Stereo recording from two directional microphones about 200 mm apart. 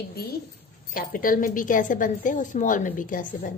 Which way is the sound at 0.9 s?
45° left (ahead or behind).